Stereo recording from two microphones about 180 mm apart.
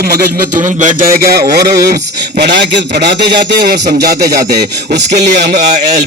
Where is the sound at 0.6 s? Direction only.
45° right (ahead or behind).